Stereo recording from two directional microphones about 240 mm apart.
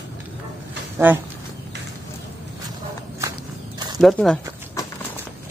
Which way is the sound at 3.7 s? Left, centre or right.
Centre.